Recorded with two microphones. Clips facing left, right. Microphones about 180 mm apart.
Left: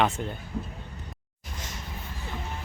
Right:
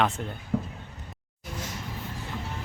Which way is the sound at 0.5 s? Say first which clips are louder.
Right 8 dB; 75° right (ahead or behind).